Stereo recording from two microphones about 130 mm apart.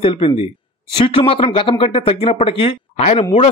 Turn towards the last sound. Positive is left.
turn(degrees=55)  # may be behind; listen again after turning